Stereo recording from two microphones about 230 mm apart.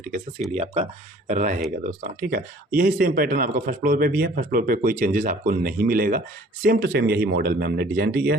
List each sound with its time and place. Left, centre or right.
0.0 s speech: right